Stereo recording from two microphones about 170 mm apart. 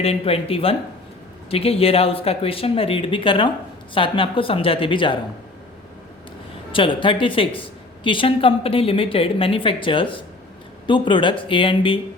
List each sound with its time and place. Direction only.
0.0 s speech: 35° left (ahead or behind)
6.7 s speech: 30° left (ahead or behind)